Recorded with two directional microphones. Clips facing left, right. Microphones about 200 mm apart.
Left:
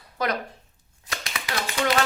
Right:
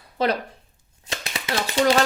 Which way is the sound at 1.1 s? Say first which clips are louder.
Right 4 dB; 25° right (ahead or behind).